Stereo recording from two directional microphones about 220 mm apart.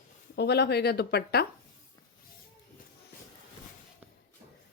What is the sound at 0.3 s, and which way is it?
A woman's voice, 50° left (ahead or behind).